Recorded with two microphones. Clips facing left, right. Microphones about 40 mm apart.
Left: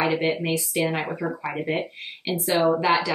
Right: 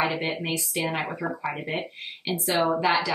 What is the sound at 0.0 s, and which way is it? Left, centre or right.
Speech, centre.